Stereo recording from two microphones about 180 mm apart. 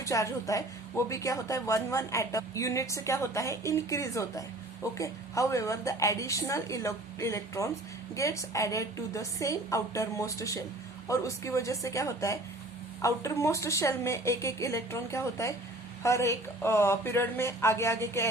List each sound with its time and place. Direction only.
0.0 s speech: 20° left (ahead or behind)